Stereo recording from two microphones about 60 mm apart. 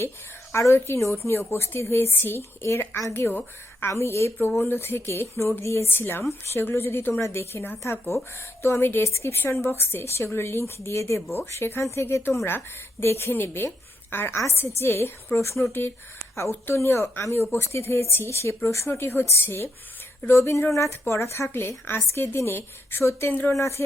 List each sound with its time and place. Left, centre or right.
0.5 s a woman's voice: left
2.6 s a woman's voice: left
3.9 s a woman's voice: left
5.9 s a woman's voice: left
7.2 s speech: left
7.5 s a woman's voice: left
7.8 s speech: left
8.6 s a woman's voice: left
9.0 s speech: left
9.5 s a woman's voice: left
12.5 s a woman's voice: left
18.9 s a woman's voice: left
19.5 s a woman's voice: left
23.5 s speech: left